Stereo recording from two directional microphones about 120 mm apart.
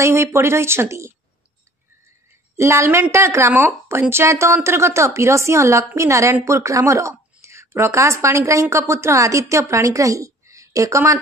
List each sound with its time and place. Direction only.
0.0 s a woman's voice: 25° right (ahead or behind)
2.5 s a woman's voice: 20° right (ahead or behind)